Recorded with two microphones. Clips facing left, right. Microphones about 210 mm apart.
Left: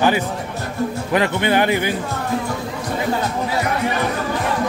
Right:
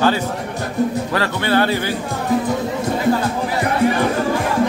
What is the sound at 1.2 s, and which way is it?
Speech, 15° left (ahead or behind).